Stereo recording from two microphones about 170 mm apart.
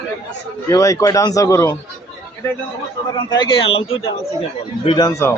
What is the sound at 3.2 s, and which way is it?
Speech, 25° left (ahead or behind).